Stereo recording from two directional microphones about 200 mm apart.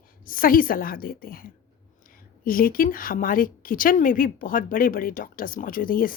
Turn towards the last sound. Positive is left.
turn(degrees=45)  # may be behind; listen again after turning